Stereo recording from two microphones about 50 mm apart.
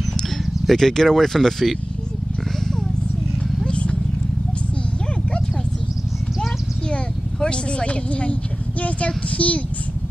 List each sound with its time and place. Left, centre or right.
0.7 s speech: centre
3.6 s horse: left
6.9 s a sound: centre
8.8 s child singing: left